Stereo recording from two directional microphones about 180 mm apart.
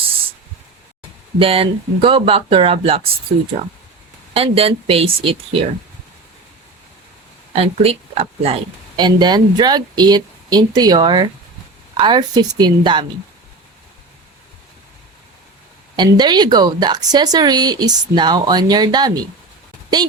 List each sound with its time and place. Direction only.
1.4 s speech: 30° right (ahead or behind)
4.4 s speech: 30° right (ahead or behind)
7.5 s a woman's voice: 35° right (ahead or behind)
16.0 s a woman's voice: 25° right (ahead or behind)